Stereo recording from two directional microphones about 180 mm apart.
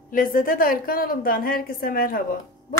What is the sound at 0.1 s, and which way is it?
A woman's voice, 50° left (ahead or behind).